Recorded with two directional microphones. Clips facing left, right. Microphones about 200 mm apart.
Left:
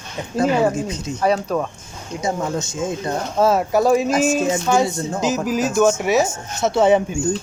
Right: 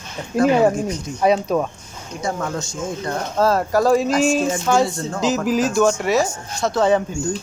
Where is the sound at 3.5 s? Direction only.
5° left (ahead or behind).